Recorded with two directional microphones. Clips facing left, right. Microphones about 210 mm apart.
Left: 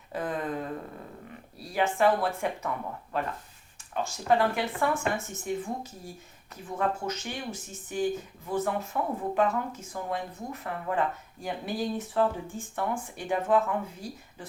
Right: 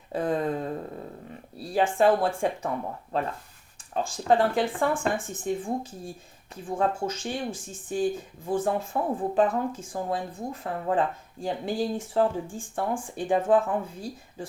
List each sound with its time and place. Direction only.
0.1 s speech: 30° right (ahead or behind)
1.7 s speech: 30° right (ahead or behind)